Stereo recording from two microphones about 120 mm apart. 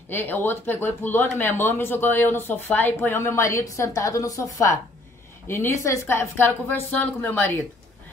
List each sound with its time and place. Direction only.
0.1 s speech: 15° left (ahead or behind)